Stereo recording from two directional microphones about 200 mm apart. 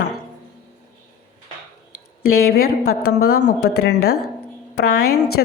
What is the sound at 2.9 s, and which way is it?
A woman's voice, 50° left (ahead or behind).